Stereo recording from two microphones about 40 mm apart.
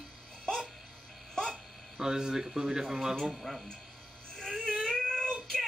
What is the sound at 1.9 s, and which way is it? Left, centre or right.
Speech, centre.